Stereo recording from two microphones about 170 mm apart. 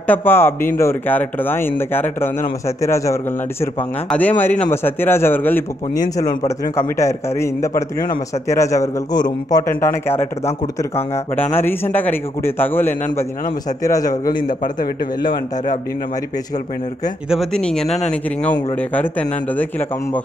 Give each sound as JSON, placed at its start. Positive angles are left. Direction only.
{"t": 0.0, "sound": "speech", "side_deg": 10}
{"t": 11.5, "sound": "speech", "side_deg": 10}
{"t": 17.3, "sound": "speech", "side_deg": 0}